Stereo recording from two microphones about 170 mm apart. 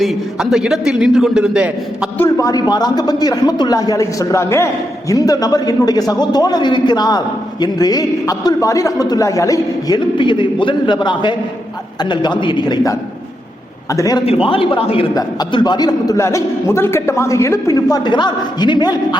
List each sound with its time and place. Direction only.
0.0 s a man's voice: centre (ahead or behind)
2.1 s speech: 15° left (ahead or behind)
14.3 s a man's voice: 35° left (ahead or behind)